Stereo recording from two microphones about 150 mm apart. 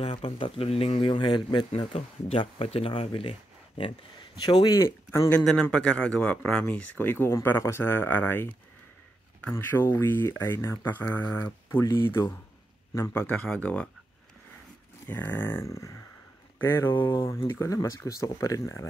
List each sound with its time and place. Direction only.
0.0 s speech: 40° left (ahead or behind)
2.0 s speech: 45° left (ahead or behind); by 5.3 s 20° left (ahead or behind)
5.3 s speech: 5° left (ahead or behind)
15.0 s speech: 15° left (ahead or behind)
16.9 s speech: 30° left (ahead or behind)